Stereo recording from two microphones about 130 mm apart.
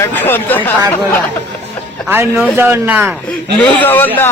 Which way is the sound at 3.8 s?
15° left (ahead or behind).